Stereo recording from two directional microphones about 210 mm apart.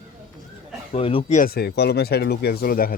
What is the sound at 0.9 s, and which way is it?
Speech, 25° left (ahead or behind).